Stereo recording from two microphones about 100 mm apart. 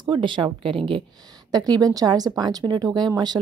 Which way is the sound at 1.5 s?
40° right (ahead or behind).